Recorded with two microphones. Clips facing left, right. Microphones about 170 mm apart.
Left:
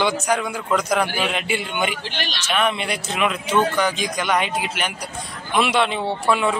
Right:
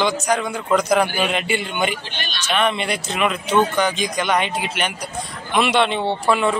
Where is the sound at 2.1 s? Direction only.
85° left.